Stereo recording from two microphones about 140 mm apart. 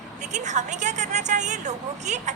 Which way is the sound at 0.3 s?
55° right (ahead or behind).